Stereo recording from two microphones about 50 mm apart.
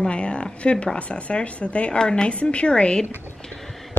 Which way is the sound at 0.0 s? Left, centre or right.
Left.